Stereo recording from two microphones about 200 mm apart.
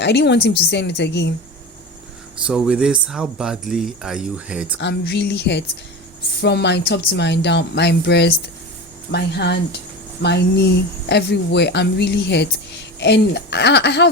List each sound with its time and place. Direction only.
0.0 s speech: 60° left (ahead or behind)
2.4 s speech: 5° right (ahead or behind)
4.8 s speech: 60° left (ahead or behind)